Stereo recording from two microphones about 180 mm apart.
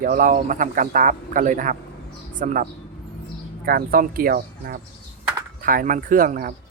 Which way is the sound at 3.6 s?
55° right (ahead or behind).